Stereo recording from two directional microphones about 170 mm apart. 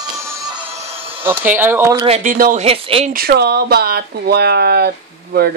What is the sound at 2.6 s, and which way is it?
Speech, 35° right (ahead or behind).